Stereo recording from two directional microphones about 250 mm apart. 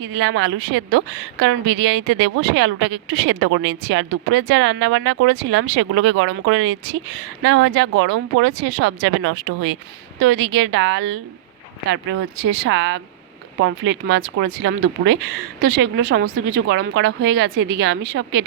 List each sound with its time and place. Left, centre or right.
0.0 s a woman's voice: right
12.4 s a woman's voice: right